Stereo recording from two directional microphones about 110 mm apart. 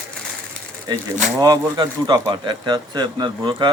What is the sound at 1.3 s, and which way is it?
Speech, 35° right (ahead or behind).